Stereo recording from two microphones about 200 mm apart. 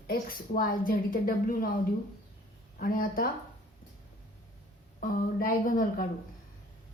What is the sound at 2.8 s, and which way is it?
Speech, 45° left (ahead or behind).